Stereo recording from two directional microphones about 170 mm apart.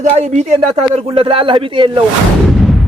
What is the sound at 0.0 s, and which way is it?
A man's voice, 45° right (ahead or behind).